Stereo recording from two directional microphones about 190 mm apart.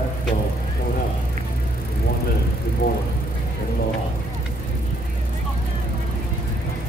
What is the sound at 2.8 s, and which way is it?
Speech, 55° left (ahead or behind).